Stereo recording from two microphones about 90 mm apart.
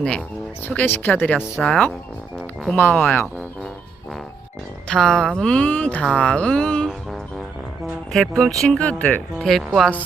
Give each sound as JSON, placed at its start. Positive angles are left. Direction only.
{"t": 0.6, "sound": "speech", "side_deg": 20}
{"t": 1.6, "sound": "speech", "side_deg": 5}
{"t": 2.7, "sound": "speech", "side_deg": 20}
{"t": 4.9, "sound": "speech", "side_deg": 5}
{"t": 8.1, "sound": "speech", "side_deg": 5}
{"t": 9.4, "sound": "speech", "side_deg": 5}